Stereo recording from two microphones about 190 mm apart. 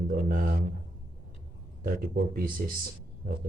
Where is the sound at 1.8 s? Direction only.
50° right (ahead or behind).